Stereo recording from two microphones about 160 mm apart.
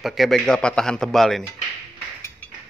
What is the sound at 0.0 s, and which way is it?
A man's voice, centre (ahead or behind).